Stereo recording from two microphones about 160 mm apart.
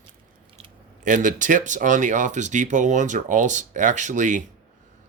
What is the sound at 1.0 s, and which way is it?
Speech, 55° right (ahead or behind).